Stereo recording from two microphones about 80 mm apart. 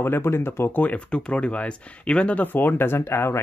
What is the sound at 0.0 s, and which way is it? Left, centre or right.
Speech, left.